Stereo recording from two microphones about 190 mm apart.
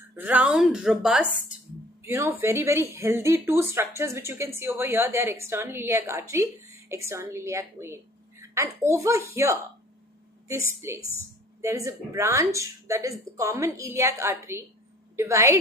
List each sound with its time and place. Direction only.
0.1 s a woman's voice: 10° right (ahead or behind)
2.0 s a woman's voice: 15° right (ahead or behind)